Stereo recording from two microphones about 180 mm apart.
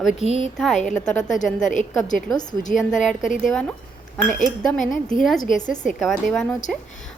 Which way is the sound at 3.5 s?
5° left (ahead or behind).